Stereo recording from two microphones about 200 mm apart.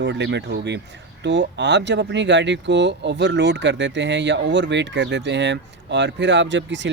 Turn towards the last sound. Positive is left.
turn(degrees=-65)  # may be behind; listen again after turning